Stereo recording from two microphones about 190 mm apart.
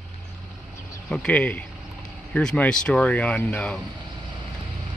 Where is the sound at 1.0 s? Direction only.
5° left (ahead or behind).